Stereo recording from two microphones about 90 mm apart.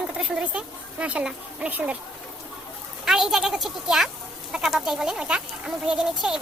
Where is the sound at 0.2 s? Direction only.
10° right (ahead or behind).